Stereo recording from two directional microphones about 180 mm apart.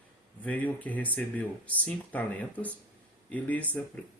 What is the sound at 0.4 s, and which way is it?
Speech, 10° left (ahead or behind).